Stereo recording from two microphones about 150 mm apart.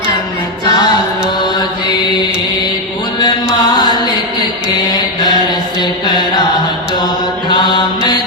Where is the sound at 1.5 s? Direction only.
30° left (ahead or behind).